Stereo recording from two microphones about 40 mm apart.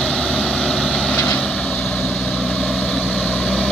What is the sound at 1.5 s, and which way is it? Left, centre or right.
Vehicle, centre.